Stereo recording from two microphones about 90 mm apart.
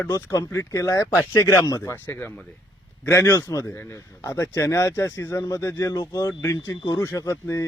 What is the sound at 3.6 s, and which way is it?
Speech, 25° left (ahead or behind).